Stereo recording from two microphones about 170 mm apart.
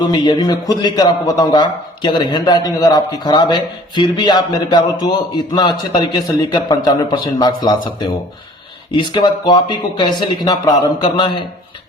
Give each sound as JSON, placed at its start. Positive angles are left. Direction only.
{"t": 0.1, "sound": "a man's voice", "side_deg": 25}